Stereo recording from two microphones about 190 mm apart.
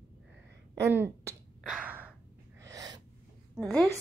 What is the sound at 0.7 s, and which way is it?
Speech, 15° right (ahead or behind).